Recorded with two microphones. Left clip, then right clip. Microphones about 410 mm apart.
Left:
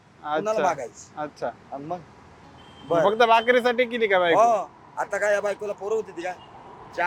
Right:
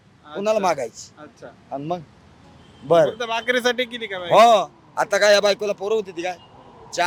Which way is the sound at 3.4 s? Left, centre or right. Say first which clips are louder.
Even; centre.